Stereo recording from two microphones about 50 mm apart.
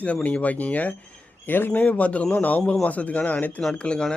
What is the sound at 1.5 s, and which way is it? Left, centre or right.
Speech, left.